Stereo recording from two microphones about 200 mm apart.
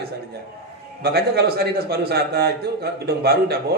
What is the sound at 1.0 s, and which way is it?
A man's voice, 50° right (ahead or behind).